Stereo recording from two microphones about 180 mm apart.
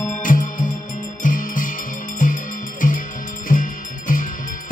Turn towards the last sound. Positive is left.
turn(degrees=50)  # may be behind; listen again after turning